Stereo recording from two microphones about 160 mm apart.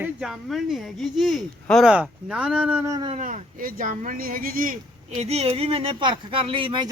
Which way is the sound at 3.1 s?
50° right (ahead or behind).